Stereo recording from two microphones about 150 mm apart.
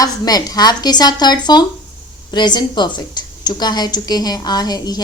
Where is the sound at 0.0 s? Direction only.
25° left (ahead or behind).